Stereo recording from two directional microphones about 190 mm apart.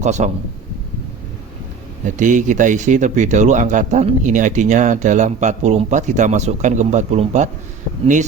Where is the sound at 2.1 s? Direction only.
40° right (ahead or behind).